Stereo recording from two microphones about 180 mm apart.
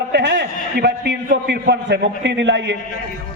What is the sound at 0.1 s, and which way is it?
A man's voice, 70° right (ahead or behind).